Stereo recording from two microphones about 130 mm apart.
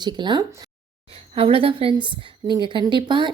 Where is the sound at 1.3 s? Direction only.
45° right (ahead or behind).